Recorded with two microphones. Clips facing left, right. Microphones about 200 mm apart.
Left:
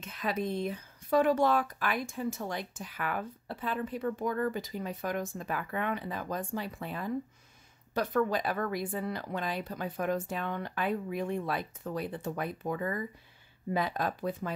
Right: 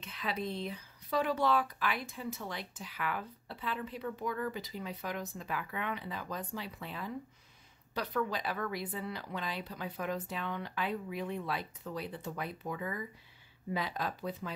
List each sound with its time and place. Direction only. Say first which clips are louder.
0.0 s speech: left 4 dB; 45° left (ahead or behind)